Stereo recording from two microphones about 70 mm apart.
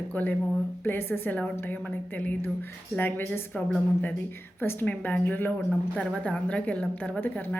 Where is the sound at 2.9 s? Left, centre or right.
Left.